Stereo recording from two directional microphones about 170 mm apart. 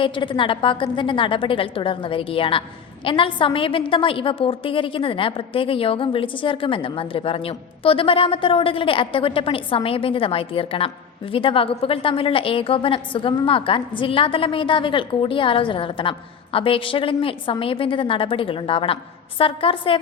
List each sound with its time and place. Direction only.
0.0 s a woman's voice: 30° left (ahead or behind)